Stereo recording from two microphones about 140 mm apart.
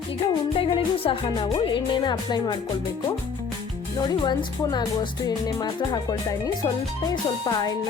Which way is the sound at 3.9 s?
30° left (ahead or behind).